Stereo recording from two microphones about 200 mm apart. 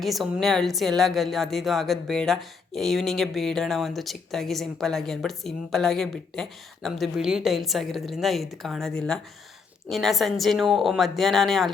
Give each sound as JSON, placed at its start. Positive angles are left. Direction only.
{"t": 0.0, "sound": "a woman's voice", "side_deg": 0}